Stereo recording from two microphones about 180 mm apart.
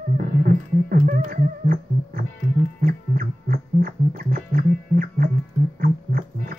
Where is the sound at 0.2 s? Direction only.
50° right (ahead or behind).